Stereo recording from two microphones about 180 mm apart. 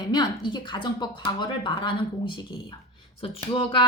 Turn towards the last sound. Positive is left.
turn(degrees=30)  # may be behind; listen again after turning